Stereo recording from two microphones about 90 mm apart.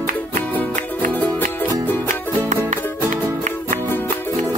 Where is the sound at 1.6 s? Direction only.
25° left (ahead or behind).